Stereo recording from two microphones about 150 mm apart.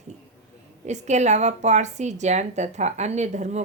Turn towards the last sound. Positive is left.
turn(degrees=-50)  # may be behind; listen again after turning